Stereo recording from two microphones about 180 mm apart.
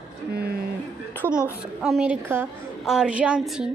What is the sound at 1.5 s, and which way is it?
A woman's voice, 5° right (ahead or behind).